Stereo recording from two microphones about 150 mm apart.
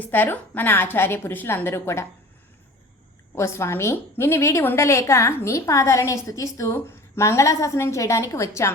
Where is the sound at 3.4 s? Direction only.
20° left (ahead or behind).